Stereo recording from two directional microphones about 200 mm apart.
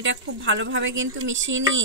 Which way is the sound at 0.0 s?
65° right (ahead or behind).